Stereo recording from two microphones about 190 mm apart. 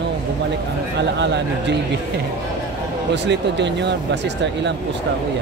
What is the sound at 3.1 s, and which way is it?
Speech, 65° right (ahead or behind).